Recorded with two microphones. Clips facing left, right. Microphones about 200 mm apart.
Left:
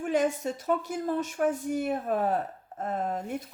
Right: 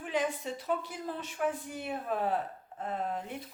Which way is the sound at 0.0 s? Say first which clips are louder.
Left 6 dB; 45° left (ahead or behind).